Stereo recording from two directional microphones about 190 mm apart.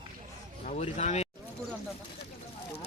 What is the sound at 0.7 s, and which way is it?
Speech, 35° left (ahead or behind).